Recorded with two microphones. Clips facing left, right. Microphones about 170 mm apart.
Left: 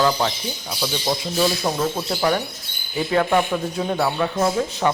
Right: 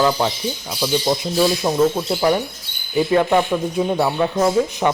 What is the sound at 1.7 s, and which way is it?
A woman's voice, 10° right (ahead or behind).